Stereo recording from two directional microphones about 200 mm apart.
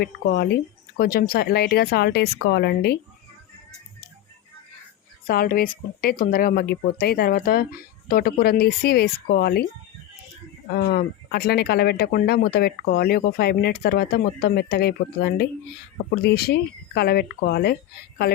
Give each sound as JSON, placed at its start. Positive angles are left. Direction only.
{"t": 0.0, "sound": "speech", "side_deg": 50}
{"t": 5.2, "sound": "speech", "side_deg": 50}
{"t": 10.8, "sound": "speech", "side_deg": 50}